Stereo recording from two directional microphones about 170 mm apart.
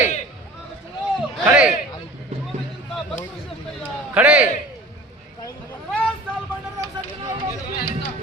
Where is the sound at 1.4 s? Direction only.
5° right (ahead or behind).